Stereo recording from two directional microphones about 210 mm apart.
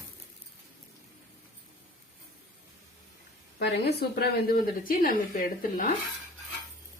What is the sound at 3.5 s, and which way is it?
A woman's voice, 50° left (ahead or behind).